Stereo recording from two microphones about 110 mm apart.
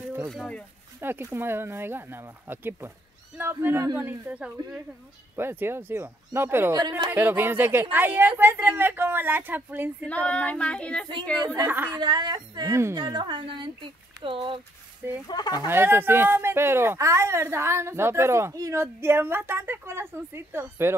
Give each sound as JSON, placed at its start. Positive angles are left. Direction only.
{"t": 0.3, "sound": "female singing", "side_deg": 10}
{"t": 1.0, "sound": "a woman's voice", "side_deg": -20}
{"t": 6.8, "sound": "speech", "side_deg": -40}
{"t": 7.1, "sound": "a woman's voice", "side_deg": -20}
{"t": 10.0, "sound": "female singing", "side_deg": 10}
{"t": 11.6, "sound": "a woman's voice", "side_deg": -20}
{"t": 11.9, "sound": "a woman's voice", "side_deg": -40}
{"t": 15.2, "sound": "speech", "side_deg": 40}
{"t": 15.7, "sound": "a woman's voice", "side_deg": -20}